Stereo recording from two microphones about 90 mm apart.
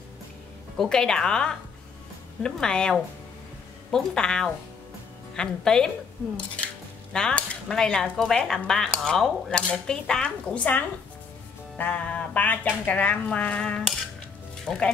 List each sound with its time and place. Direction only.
0.7 s cutlery: 5° left (ahead or behind)
11.8 s cutlery: 15° left (ahead or behind)
14.7 s speech: centre (ahead or behind)